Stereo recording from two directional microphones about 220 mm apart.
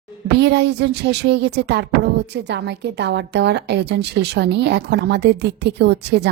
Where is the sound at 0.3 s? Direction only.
50° right (ahead or behind).